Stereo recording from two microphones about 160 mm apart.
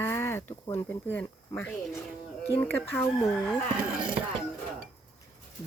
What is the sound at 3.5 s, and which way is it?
Speech, 5° right (ahead or behind).